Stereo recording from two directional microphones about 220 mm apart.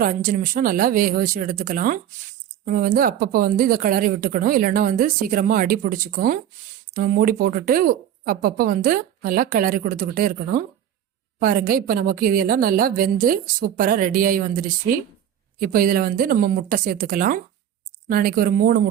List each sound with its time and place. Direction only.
0.0 s speech: 40° right (ahead or behind)